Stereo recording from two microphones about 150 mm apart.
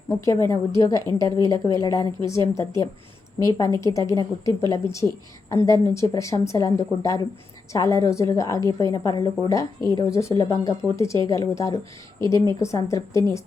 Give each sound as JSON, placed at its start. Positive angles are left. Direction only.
{"t": 0.1, "sound": "a woman's voice", "side_deg": 20}